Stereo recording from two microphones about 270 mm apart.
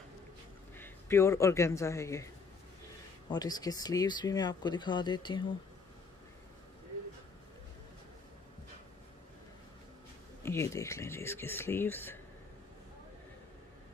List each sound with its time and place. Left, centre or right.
0.7 s a man's voice: centre
10.4 s speech: centre